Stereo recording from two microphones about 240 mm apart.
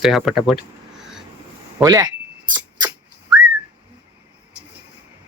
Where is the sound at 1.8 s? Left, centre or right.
Centre.